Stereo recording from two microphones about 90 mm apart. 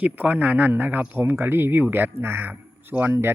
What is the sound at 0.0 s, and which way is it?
Speech, 20° right (ahead or behind).